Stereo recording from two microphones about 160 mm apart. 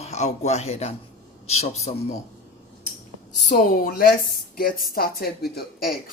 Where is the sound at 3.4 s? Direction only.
65° left (ahead or behind).